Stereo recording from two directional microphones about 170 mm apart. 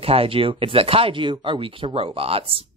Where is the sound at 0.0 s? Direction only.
35° right (ahead or behind).